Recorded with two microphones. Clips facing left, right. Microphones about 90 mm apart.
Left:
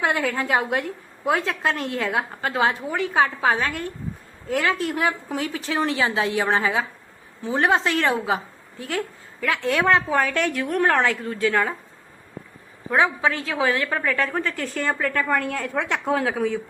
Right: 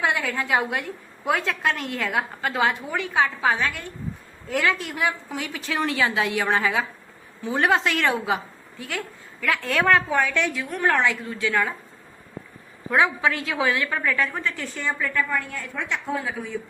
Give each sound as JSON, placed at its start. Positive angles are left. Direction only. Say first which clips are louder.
{"t": 0.0, "sound": "a woman's voice", "louder": "left 2 dB", "side_deg": 40}
{"t": 10.1, "sound": "a woman's voice", "louder": "left 1 dB", "side_deg": 40}
{"t": 10.9, "sound": "a woman's voice", "louder": "left 1 dB", "side_deg": 45}
{"t": 12.9, "sound": "a woman's voice", "louder": "left 1 dB", "side_deg": 35}